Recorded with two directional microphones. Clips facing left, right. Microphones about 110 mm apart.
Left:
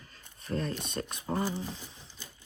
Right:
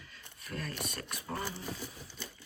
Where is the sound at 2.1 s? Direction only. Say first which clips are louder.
Right 4 dB; 55° right (ahead or behind).